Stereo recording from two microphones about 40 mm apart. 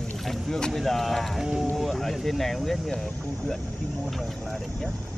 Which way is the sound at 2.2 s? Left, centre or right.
Centre.